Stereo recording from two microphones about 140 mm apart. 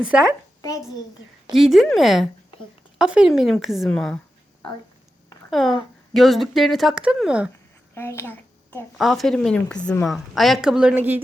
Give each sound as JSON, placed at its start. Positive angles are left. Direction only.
{"t": 0.0, "sound": "a woman's voice", "side_deg": -10}
{"t": 1.5, "sound": "a woman's voice", "side_deg": 0}
{"t": 5.5, "sound": "a woman's voice", "side_deg": 0}
{"t": 7.9, "sound": "a child's voice", "side_deg": 20}
{"t": 9.0, "sound": "a woman's voice", "side_deg": 0}